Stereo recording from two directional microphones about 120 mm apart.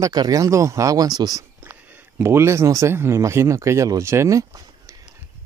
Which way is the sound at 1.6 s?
20° right (ahead or behind).